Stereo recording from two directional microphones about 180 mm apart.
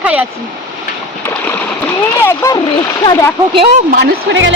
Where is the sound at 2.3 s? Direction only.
20° left (ahead or behind).